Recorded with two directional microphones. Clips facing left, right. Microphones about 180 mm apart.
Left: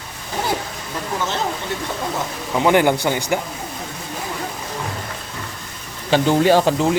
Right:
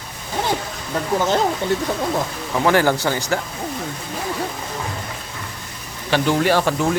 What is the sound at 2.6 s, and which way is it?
Speech, 20° left (ahead or behind).